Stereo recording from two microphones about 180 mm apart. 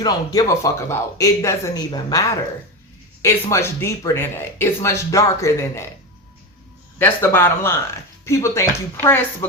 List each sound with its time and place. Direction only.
0.0 s speech: 20° left (ahead or behind)
7.0 s speech: 10° left (ahead or behind)